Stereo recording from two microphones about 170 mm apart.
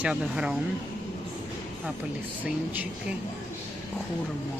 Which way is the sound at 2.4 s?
10° right (ahead or behind).